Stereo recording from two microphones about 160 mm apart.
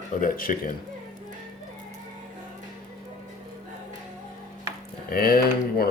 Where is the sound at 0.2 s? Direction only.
60° left (ahead or behind).